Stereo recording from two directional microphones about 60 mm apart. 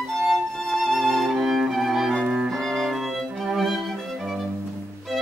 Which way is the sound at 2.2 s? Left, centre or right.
Centre.